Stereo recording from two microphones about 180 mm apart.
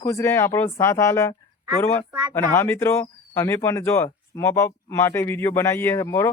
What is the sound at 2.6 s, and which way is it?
Speech, 15° left (ahead or behind).